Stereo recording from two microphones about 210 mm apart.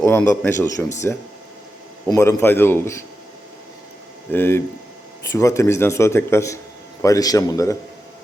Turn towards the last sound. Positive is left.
turn(degrees=15)  # may be behind; listen again after turning